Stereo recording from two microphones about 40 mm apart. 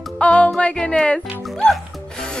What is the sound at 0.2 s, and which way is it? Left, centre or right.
Music, left.